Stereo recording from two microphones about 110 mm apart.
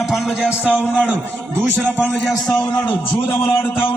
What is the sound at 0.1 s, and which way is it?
Speech, 5° right (ahead or behind).